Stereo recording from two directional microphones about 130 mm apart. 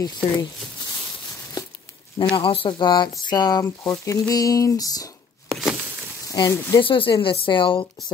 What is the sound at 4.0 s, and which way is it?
Speech, 25° left (ahead or behind).